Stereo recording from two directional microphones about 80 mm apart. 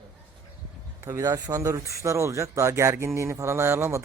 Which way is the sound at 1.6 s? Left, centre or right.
Right.